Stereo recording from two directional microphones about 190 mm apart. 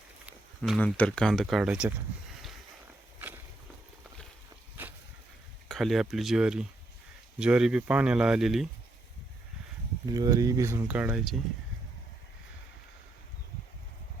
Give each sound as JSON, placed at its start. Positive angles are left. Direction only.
{"t": 0.3, "sound": "a sound", "side_deg": 0}
{"t": 0.9, "sound": "speech", "side_deg": 5}
{"t": 5.6, "sound": "speech", "side_deg": 0}
{"t": 10.1, "sound": "speech", "side_deg": -20}